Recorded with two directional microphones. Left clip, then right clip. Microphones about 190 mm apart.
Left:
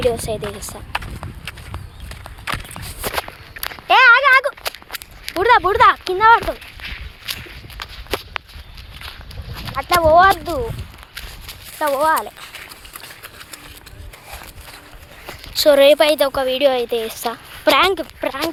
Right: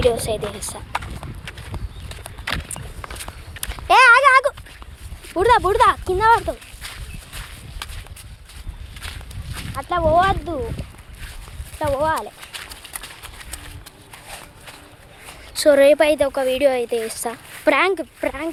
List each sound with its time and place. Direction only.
0.1 s speech: 5° right (ahead or behind)
0.9 s run: 10° left (ahead or behind)
2.4 s a sound: 10° left (ahead or behind)
3.2 s walk: 5° left (ahead or behind)
3.8 s a sound: 25° right (ahead or behind)
5.4 s a woman's voice: 10° right (ahead or behind)
6.1 s speech: centre (ahead or behind)
6.8 s a sound: 20° right (ahead or behind)
7.8 s walk: centre (ahead or behind)
9.9 s speech: 35° left (ahead or behind)
11.9 s speech: 20° left (ahead or behind)
15.5 s a woman's voice: 20° right (ahead or behind)